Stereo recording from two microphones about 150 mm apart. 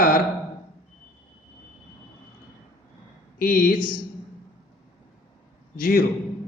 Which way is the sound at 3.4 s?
70° left (ahead or behind).